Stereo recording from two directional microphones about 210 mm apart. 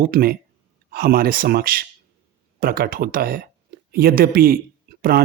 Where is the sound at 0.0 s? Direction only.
45° right (ahead or behind).